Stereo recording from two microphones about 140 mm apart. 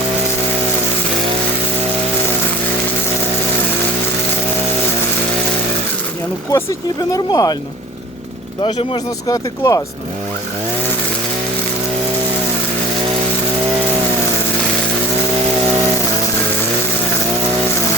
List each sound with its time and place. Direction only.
6.5 s speech: 25° left (ahead or behind)
9.2 s speech: 25° left (ahead or behind)